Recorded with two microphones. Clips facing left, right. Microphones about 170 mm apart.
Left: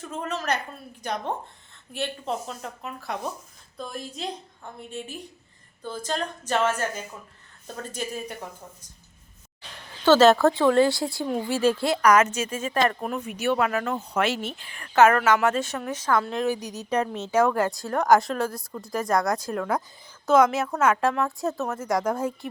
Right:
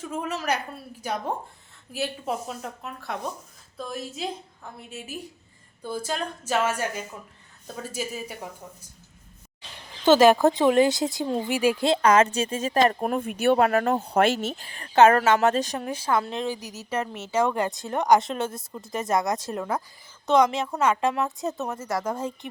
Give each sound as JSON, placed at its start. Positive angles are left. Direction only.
{"t": 0.0, "sound": "a woman's voice", "side_deg": -10}
{"t": 10.0, "sound": "speech", "side_deg": -15}
{"t": 11.9, "sound": "speech", "side_deg": -25}
{"t": 13.0, "sound": "speech", "side_deg": -50}
{"t": 16.5, "sound": "a woman's voice", "side_deg": 15}
{"t": 17.4, "sound": "a woman's voice", "side_deg": 0}
{"t": 18.9, "sound": "speech", "side_deg": -20}
{"t": 19.2, "sound": "a woman's voice", "side_deg": 0}
{"t": 21.8, "sound": "a woman's voice", "side_deg": 15}